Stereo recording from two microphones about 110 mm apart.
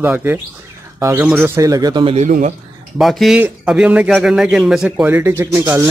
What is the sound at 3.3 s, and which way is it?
A man's voice, 10° right (ahead or behind).